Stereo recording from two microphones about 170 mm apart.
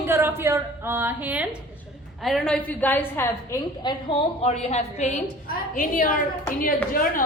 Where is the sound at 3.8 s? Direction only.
35° left (ahead or behind).